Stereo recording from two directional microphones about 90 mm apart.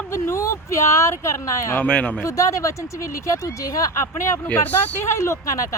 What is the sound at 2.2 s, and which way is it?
Speech, 35° left (ahead or behind).